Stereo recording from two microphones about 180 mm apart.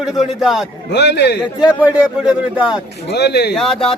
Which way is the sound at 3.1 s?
65° left (ahead or behind).